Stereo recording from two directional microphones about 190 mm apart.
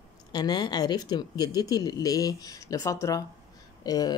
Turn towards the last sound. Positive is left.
turn(degrees=20)  # may be behind; listen again after turning